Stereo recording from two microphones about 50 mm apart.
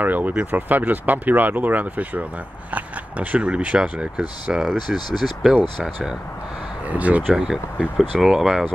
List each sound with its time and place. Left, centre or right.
0.0 s speech: right
4.6 s speech: centre
6.9 s speech: right
7.3 s speech: centre